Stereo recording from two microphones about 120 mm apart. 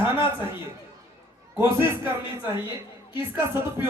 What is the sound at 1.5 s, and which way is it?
Speech, 20° right (ahead or behind).